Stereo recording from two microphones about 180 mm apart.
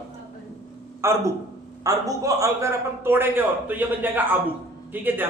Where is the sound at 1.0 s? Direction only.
15° right (ahead or behind).